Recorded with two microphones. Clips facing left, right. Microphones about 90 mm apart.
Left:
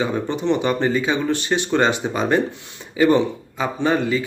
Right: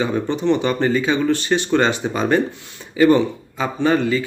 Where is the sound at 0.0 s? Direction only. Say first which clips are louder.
Right 2 dB; 10° left (ahead or behind).